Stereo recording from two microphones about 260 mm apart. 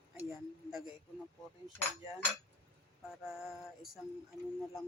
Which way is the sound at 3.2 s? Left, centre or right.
Centre.